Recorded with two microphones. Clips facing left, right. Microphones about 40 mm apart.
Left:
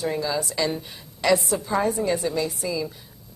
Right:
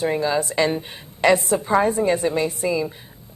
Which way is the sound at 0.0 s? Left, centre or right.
Right.